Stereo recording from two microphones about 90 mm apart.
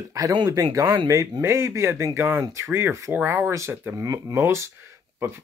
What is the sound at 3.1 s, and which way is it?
Speech, 20° right (ahead or behind).